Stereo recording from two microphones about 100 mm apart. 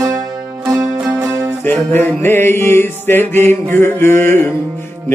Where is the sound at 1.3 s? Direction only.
25° right (ahead or behind).